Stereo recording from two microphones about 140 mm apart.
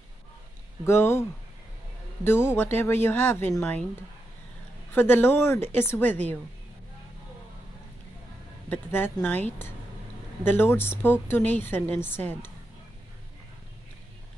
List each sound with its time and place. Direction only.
0.8 s speech: 20° left (ahead or behind)
2.2 s a woman's voice: 15° left (ahead or behind)
4.9 s a woman's voice: 15° left (ahead or behind)
8.6 s a woman's voice: 15° left (ahead or behind)